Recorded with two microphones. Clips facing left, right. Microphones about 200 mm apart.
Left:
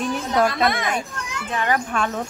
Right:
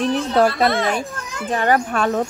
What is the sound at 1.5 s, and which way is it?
Speech, 40° right (ahead or behind).